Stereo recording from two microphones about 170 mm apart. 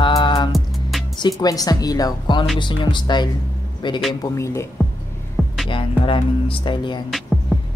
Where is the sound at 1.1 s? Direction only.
25° left (ahead or behind).